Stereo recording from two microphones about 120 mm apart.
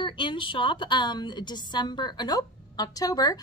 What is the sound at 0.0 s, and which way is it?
Speech, 45° left (ahead or behind).